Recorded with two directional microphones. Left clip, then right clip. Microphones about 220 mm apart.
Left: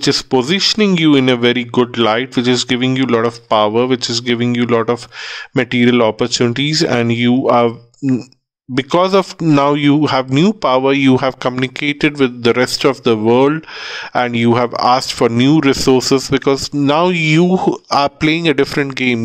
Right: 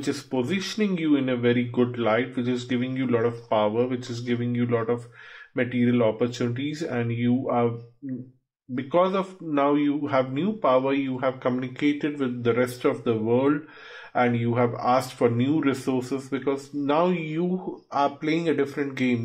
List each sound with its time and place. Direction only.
0.0 s speech: 55° left (ahead or behind)